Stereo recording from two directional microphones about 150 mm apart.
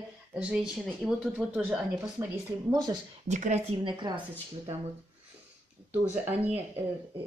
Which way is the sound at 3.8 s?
30° right (ahead or behind).